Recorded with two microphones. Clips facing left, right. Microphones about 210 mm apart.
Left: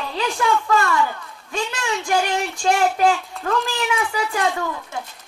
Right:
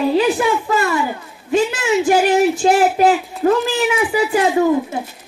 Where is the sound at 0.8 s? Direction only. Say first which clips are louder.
Right 2 dB; 20° right (ahead or behind).